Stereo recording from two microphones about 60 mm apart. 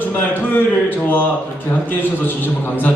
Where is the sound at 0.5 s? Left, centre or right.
Left.